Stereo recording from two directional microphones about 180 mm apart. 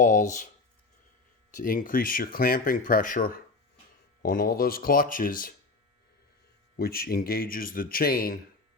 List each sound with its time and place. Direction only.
0.0 s speech: 45° left (ahead or behind)
1.5 s speech: 50° left (ahead or behind)
6.7 s speech: 55° left (ahead or behind)